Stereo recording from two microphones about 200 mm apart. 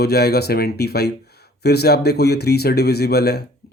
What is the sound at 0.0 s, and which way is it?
Speech, 55° left (ahead or behind).